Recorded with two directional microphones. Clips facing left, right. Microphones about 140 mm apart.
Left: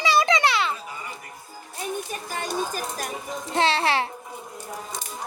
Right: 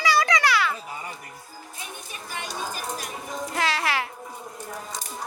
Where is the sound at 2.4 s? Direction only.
45° left (ahead or behind).